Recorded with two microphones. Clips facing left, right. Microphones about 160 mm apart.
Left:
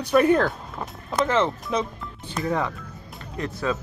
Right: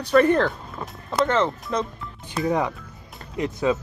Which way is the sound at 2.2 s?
15° right (ahead or behind).